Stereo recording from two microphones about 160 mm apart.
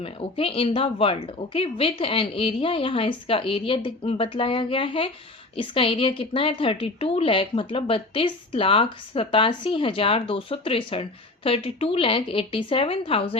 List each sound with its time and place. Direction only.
0.0 s a woman's voice: 35° left (ahead or behind)